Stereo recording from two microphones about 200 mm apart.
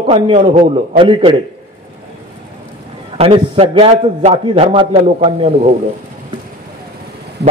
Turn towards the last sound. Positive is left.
turn(degrees=-30)  # may be behind; listen again after turning